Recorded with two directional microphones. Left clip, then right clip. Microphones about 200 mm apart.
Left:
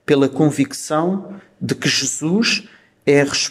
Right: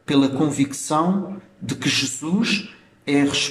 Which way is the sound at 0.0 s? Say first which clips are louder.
Left 4 dB; 30° left (ahead or behind).